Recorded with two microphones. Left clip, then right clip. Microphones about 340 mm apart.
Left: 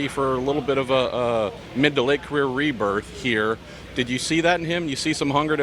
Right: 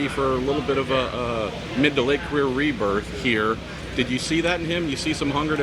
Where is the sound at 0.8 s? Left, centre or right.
Left.